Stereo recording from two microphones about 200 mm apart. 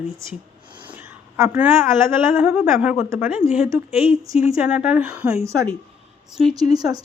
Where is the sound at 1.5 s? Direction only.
10° right (ahead or behind).